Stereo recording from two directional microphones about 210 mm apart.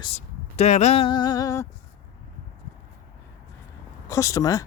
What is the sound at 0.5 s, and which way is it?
Speech, 30° left (ahead or behind).